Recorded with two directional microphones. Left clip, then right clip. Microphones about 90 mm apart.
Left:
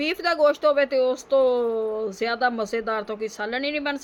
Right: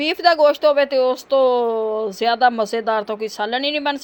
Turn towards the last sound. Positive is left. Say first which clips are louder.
# right 6 dB
turn(degrees=-20)  # may be behind; listen again after turning